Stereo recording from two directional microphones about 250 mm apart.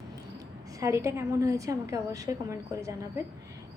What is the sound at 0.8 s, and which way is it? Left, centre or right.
A woman's voice, centre.